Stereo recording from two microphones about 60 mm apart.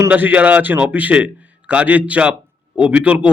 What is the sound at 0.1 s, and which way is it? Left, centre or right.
A man's voice, right.